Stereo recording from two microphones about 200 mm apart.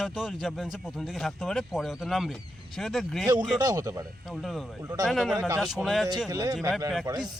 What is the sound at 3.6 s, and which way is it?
Speech, 20° right (ahead or behind).